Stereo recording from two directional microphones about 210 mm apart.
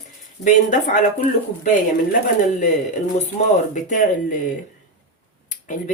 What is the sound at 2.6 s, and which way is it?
Speech, 35° left (ahead or behind).